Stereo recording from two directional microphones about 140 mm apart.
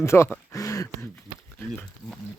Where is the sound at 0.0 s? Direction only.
20° left (ahead or behind).